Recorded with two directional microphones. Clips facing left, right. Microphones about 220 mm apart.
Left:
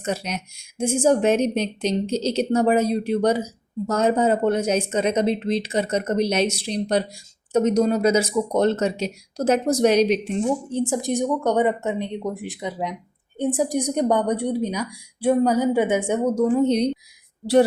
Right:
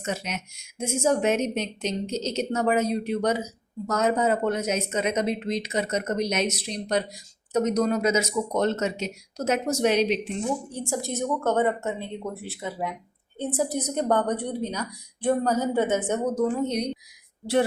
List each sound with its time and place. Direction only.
0.0 s a woman's voice: 35° left (ahead or behind)
10.7 s a woman's voice: 20° left (ahead or behind)
16.6 s a woman's voice: 30° left (ahead or behind)